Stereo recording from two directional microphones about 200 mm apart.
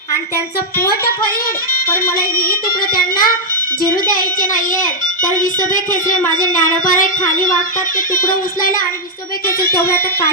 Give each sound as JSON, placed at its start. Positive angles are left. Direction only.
{"t": 0.8, "sound": "speech", "side_deg": 50}
{"t": 2.1, "sound": "speech", "side_deg": 45}